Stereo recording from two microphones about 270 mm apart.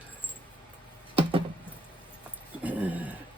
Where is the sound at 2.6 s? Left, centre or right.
Centre.